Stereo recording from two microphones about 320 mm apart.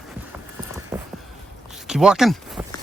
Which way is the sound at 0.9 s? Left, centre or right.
Centre.